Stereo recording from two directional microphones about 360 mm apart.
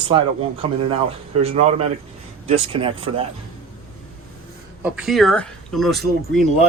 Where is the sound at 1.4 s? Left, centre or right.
Centre.